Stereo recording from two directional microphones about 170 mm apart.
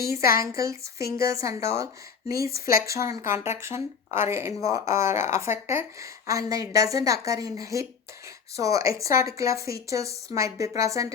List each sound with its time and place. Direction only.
0.2 s speech: 60° left (ahead or behind)
0.5 s a woman's voice: 15° right (ahead or behind)